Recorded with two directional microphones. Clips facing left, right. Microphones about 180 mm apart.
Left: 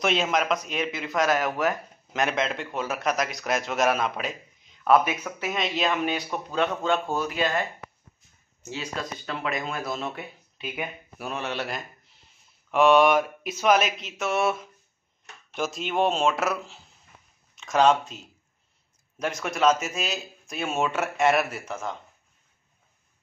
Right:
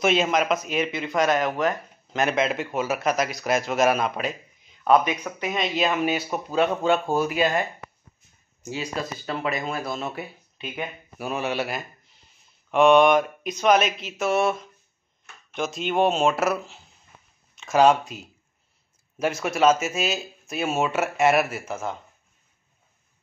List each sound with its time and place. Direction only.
0.0 s speech: centre (ahead or behind)
8.6 s speech: 10° right (ahead or behind)